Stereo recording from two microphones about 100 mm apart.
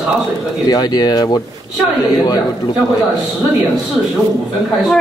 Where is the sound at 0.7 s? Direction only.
40° left (ahead or behind).